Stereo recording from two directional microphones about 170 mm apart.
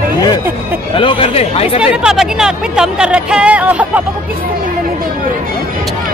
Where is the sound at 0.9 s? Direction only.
30° left (ahead or behind).